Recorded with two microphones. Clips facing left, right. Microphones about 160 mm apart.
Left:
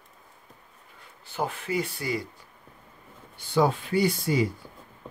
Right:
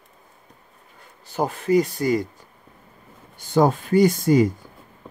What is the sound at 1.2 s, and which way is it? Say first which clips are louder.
Speech: right 8 dB; 40° right (ahead or behind).